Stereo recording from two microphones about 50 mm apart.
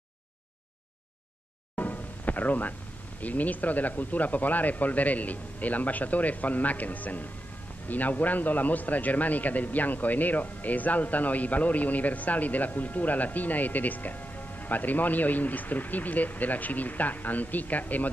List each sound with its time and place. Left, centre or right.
1.8 s music: left
3.2 s a man's voice: left